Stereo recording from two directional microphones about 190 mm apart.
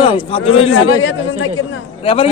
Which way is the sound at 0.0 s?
30° left (ahead or behind).